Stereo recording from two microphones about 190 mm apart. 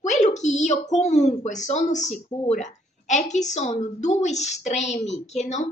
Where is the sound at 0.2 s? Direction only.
40° left (ahead or behind).